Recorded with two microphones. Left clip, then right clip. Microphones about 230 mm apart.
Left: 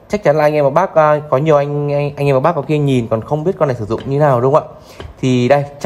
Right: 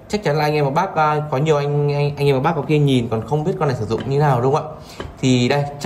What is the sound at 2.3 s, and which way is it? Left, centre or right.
Speech, left.